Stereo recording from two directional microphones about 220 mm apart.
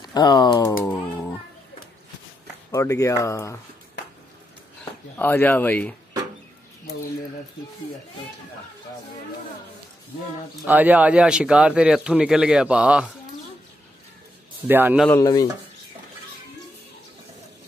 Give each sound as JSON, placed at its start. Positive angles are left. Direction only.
{"t": 0.0, "sound": "speech", "side_deg": 20}
{"t": 2.7, "sound": "speech", "side_deg": 15}
{"t": 5.1, "sound": "speech", "side_deg": 10}
{"t": 10.6, "sound": "speech", "side_deg": -5}
{"t": 14.7, "sound": "a man's voice", "side_deg": -10}
{"t": 15.0, "sound": "speech", "side_deg": 15}